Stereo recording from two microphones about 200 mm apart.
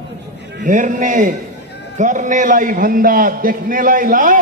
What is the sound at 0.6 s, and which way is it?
A man's voice, 40° right (ahead or behind).